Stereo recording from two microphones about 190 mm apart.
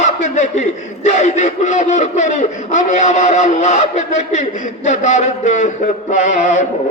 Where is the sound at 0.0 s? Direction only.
40° left (ahead or behind).